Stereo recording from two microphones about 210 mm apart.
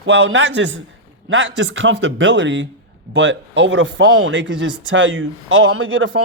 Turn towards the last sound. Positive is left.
turn(degrees=-70)  # may be behind; listen again after turning